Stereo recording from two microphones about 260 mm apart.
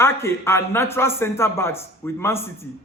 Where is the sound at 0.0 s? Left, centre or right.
Centre.